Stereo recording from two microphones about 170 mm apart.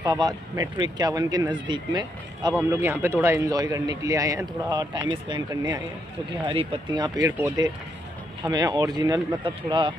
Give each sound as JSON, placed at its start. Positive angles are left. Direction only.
{"t": 0.0, "sound": "a man's voice", "side_deg": -25}
{"t": 2.7, "sound": "a man's voice", "side_deg": -15}